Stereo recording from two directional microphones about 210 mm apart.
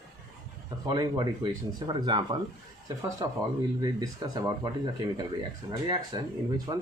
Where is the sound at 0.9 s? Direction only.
20° right (ahead or behind).